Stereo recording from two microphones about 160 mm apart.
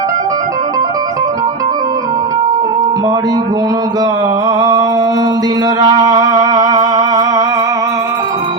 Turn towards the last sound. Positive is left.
turn(degrees=-25)  # may be behind; listen again after turning